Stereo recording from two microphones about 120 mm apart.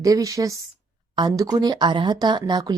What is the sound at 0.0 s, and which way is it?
A woman's voice, 30° right (ahead or behind).